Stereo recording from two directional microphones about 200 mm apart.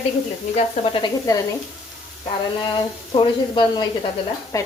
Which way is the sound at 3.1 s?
20° left (ahead or behind).